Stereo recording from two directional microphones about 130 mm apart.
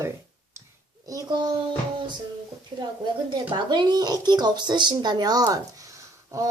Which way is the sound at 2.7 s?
30° right (ahead or behind).